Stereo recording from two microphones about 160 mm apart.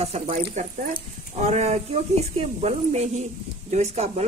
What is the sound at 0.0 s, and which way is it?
Speech, 40° right (ahead or behind).